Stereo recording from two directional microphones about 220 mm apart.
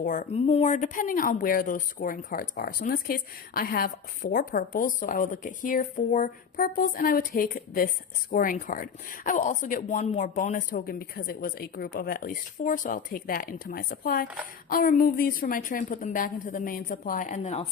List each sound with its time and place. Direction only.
0.0 s speech: 35° left (ahead or behind)